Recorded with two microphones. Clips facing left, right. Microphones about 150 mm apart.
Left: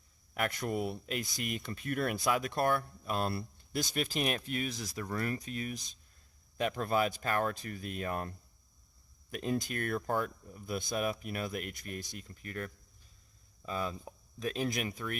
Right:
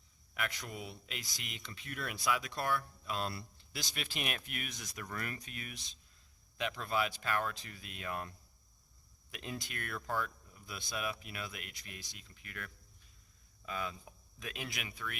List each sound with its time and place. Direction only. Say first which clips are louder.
0.3 s speech: left 8 dB; 50° left (ahead or behind)